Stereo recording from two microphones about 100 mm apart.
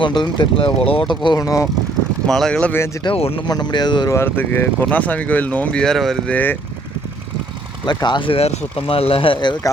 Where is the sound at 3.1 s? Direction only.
75° left (ahead or behind).